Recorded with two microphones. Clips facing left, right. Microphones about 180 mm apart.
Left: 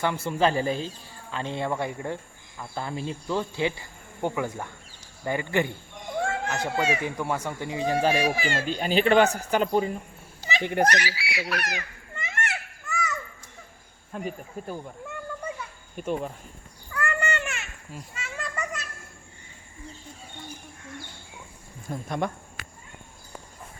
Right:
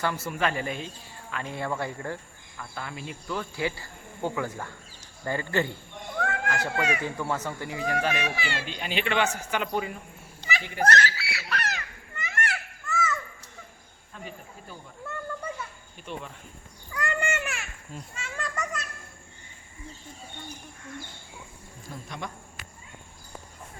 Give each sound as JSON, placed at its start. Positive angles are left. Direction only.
{"t": 0.3, "sound": "speech", "side_deg": 30}
{"t": 2.6, "sound": "speech", "side_deg": 30}
{"t": 6.2, "sound": "speech", "side_deg": 25}
{"t": 7.0, "sound": "speech", "side_deg": 15}
{"t": 10.6, "sound": "speech", "side_deg": 60}
{"t": 10.8, "sound": "speech", "side_deg": 15}
{"t": 12.1, "sound": "children playing", "side_deg": 25}
{"t": 14.1, "sound": "speech", "side_deg": 50}
{"t": 16.0, "sound": "speech", "side_deg": 45}
{"t": 16.9, "sound": "a sound", "side_deg": -15}
{"t": 17.4, "sound": "a sound", "side_deg": 0}
{"t": 21.8, "sound": "speech", "side_deg": 55}